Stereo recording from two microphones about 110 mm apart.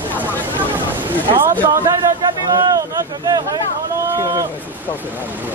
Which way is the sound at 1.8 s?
30° right (ahead or behind).